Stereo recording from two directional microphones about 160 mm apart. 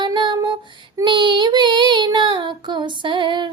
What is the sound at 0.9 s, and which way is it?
Child singing, 30° right (ahead or behind).